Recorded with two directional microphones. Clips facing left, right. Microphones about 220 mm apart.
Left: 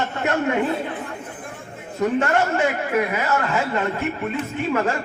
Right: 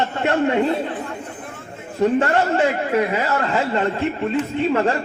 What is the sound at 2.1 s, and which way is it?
Speech, 30° right (ahead or behind).